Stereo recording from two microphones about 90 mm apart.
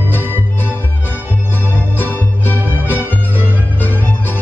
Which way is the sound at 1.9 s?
20° left (ahead or behind).